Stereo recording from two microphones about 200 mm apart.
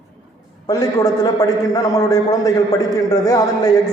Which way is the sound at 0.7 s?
20° left (ahead or behind).